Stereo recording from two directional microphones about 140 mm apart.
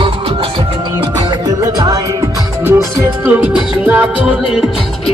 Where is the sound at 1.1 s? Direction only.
30° right (ahead or behind).